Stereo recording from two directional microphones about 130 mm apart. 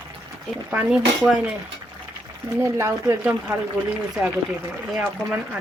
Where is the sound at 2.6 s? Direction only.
20° right (ahead or behind).